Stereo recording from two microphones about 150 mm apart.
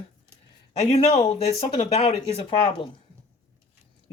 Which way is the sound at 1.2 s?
45° left (ahead or behind).